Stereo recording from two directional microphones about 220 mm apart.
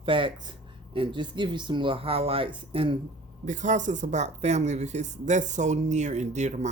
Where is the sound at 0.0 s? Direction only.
25° right (ahead or behind).